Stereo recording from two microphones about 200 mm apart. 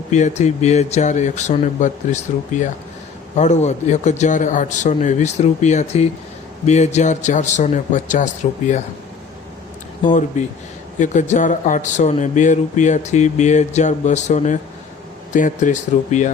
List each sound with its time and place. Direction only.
0.1 s speech: 35° left (ahead or behind)
10.0 s speech: 40° left (ahead or behind)